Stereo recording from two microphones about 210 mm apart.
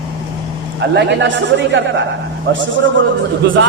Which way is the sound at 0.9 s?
55° right (ahead or behind).